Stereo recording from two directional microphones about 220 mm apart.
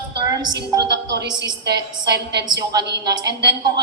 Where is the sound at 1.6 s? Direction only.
50° right (ahead or behind).